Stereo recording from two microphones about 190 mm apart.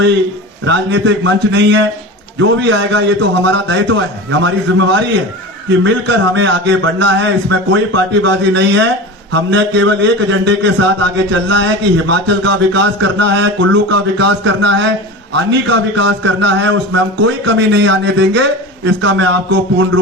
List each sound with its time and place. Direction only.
0.6 s a man's voice: 65° right (ahead or behind); by 4.9 s 85° right
5.8 s a man's voice: 70° right (ahead or behind)